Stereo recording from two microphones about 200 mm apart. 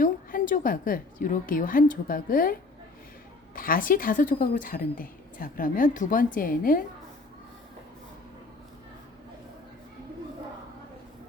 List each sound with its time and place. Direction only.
0.0 s a woman's voice: 45° left (ahead or behind)